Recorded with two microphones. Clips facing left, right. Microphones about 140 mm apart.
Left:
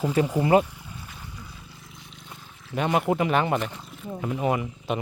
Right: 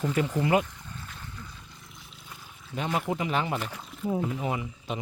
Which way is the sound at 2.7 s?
65° left (ahead or behind).